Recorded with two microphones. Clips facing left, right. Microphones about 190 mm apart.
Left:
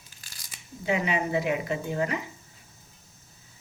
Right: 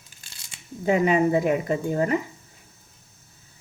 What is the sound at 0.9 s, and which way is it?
Speech, 45° right (ahead or behind).